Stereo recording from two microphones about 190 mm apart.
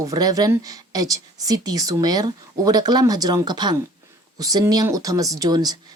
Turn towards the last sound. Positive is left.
turn(degrees=-20)  # may be behind; listen again after turning